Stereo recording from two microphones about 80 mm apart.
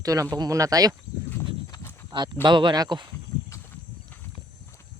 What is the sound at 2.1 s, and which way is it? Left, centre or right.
Speech, right.